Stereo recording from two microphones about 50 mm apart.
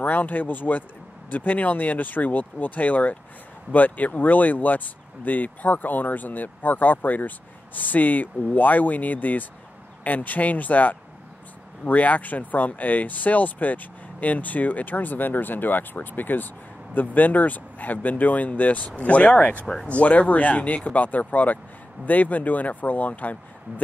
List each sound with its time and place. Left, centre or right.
0.0 s speech: left
19.6 s speech: centre
20.0 s speech: left